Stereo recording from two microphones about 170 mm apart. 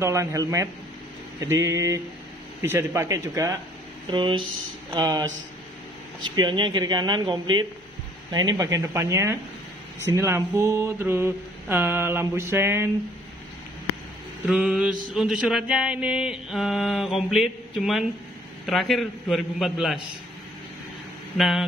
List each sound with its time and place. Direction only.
0.0 s mantra: 20° right (ahead or behind)
4.1 s speech: 30° right (ahead or behind)
6.2 s speech: 30° right (ahead or behind)
10.1 s mantra: 15° right (ahead or behind)
14.4 s mantra: 5° right (ahead or behind)
21.4 s mantra: centre (ahead or behind)